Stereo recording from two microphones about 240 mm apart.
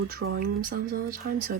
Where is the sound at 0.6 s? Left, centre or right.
Right.